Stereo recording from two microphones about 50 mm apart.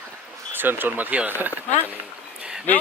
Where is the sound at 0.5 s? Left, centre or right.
Right.